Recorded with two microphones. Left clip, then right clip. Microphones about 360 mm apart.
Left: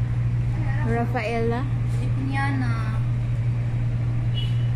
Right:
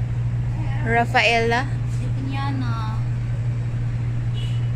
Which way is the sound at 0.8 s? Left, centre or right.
Right.